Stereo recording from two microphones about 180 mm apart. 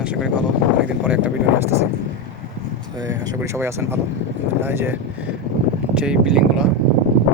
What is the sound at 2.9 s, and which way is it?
Speech, 20° right (ahead or behind).